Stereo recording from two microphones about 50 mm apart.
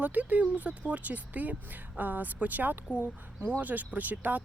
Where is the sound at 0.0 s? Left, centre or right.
Right.